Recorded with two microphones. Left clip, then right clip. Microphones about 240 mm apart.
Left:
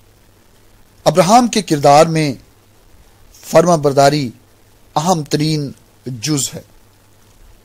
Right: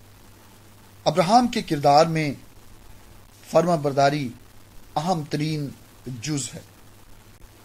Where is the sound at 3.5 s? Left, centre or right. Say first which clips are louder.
Left 9 dB; left.